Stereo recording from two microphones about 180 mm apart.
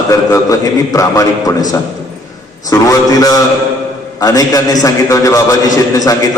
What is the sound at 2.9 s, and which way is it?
Mantra, 20° left (ahead or behind).